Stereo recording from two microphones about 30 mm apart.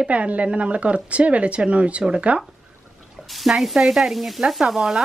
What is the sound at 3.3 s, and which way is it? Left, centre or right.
Stir, centre.